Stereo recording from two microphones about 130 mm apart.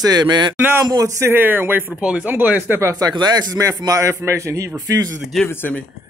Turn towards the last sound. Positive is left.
turn(degrees=15)  # may be behind; listen again after turning